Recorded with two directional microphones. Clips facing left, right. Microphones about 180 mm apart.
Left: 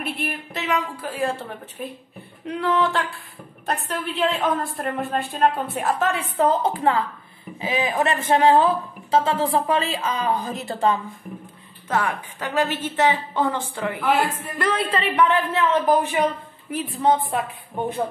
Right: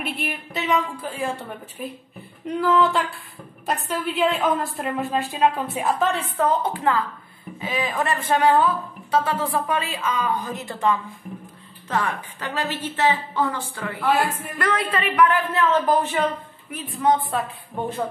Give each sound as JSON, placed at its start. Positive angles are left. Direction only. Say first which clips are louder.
{"t": 0.0, "sound": "a woman's voice", "louder": "left 1 dB", "side_deg": 0}
{"t": 2.6, "sound": "a woman's voice", "louder": "right 2 dB", "side_deg": 0}
{"t": 6.3, "sound": "a woman's voice", "louder": "left 2 dB", "side_deg": 25}
{"t": 11.9, "sound": "a woman's voice", "louder": "left 1 dB", "side_deg": 10}
{"t": 14.6, "sound": "a woman's voice", "louder": "left 1 dB", "side_deg": 30}
{"t": 15.9, "sound": "a woman's voice", "louder": "left 1 dB", "side_deg": 10}
{"t": 16.7, "sound": "a woman's voice", "louder": "left 1 dB", "side_deg": 25}